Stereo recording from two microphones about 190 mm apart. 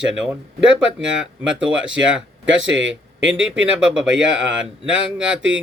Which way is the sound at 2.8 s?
80° right.